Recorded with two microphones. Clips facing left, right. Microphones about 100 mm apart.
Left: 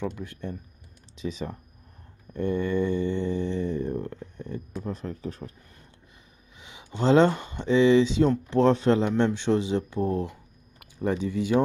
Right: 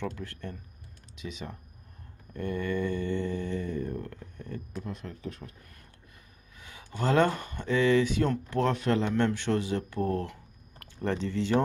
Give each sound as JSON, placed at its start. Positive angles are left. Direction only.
{"t": 0.0, "sound": "speech", "side_deg": 15}
{"t": 1.1, "sound": "speech", "side_deg": 30}
{"t": 2.3, "sound": "speech", "side_deg": 25}
{"t": 4.8, "sound": "speech", "side_deg": 35}
{"t": 6.6, "sound": "speech", "side_deg": 20}